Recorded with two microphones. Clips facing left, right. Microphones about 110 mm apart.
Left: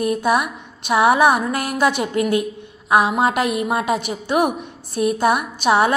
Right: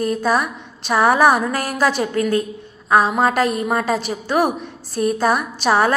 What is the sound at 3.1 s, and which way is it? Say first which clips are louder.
Speech: right 1 dB; 15° left (ahead or behind).